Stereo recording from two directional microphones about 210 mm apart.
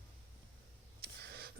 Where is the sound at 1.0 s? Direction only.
50° right (ahead or behind).